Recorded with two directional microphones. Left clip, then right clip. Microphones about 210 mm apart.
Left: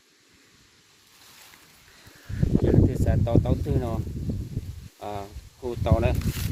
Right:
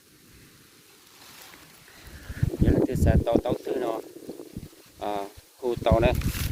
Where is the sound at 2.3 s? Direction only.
5° right (ahead or behind).